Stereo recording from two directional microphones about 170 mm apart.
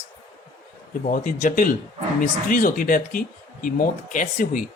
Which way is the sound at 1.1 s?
50° left (ahead or behind).